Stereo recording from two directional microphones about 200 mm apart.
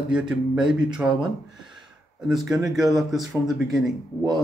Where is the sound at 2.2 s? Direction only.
Centre (ahead or behind).